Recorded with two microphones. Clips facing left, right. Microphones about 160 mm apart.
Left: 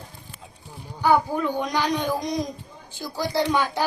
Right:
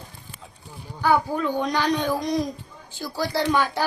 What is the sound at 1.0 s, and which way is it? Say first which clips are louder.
Female singing: left 1 dB; 15° left (ahead or behind).